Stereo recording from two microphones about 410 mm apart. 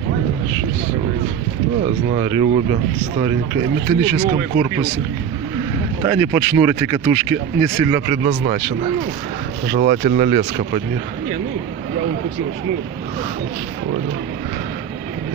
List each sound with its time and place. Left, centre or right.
2.1 s speech: centre
4.0 s speech: centre
6.0 s speech: centre
9.8 s speech: centre